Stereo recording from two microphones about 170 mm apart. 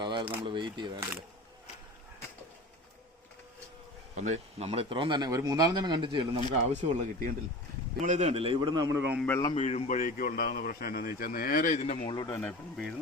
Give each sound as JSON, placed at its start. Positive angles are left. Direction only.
{"t": 0.0, "sound": "a sound", "side_deg": -30}
{"t": 0.4, "sound": "speech", "side_deg": -25}
{"t": 4.1, "sound": "speech", "side_deg": -45}
{"t": 7.0, "sound": "speech", "side_deg": -55}
{"t": 9.6, "sound": "speech", "side_deg": 45}
{"t": 12.0, "sound": "speech", "side_deg": 25}
{"t": 12.4, "sound": "speech", "side_deg": 5}